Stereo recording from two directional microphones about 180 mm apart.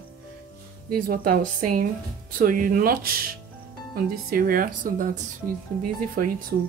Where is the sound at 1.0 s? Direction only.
50° right (ahead or behind).